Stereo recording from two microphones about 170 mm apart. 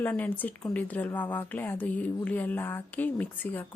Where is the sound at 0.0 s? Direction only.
10° left (ahead or behind).